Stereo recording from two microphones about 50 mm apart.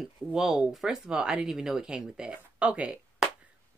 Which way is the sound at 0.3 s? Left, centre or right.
Centre.